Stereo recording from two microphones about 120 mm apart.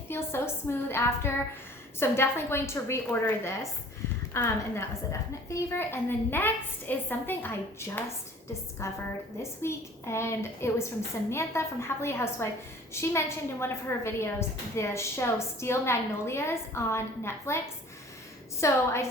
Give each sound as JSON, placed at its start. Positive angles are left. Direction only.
{"t": 0.1, "sound": "a woman's voice", "side_deg": 20}
{"t": 18.6, "sound": "a woman's voice", "side_deg": 25}